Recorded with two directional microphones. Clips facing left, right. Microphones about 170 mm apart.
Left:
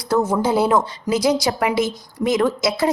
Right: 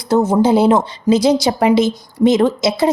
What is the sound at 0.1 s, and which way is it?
A woman's voice, 25° right (ahead or behind).